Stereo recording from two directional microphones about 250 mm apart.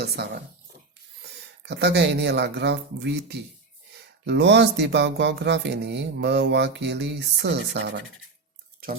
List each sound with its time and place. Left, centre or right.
0.2 s speech: right
1.6 s speech: right